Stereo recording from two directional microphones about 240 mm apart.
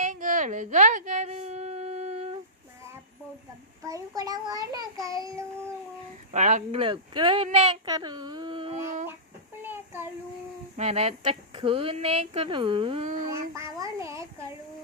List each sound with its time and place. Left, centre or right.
0.0 s a sound: right
3.8 s a child's voice: centre
6.3 s speech: right
9.6 s child singing: centre
10.8 s speech: right
13.3 s a child's voice: centre